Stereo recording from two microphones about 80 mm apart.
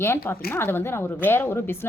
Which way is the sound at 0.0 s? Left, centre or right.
Left.